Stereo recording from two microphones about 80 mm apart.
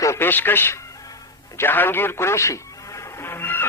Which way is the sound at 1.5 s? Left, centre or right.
Left.